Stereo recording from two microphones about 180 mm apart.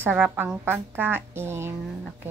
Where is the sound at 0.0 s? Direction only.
10° right (ahead or behind).